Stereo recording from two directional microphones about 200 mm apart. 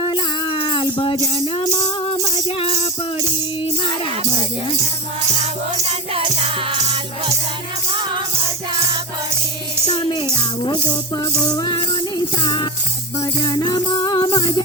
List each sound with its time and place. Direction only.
0.0 s music: 20° left (ahead or behind)
5.9 s music: 30° right (ahead or behind)
9.8 s music: 20° left (ahead or behind)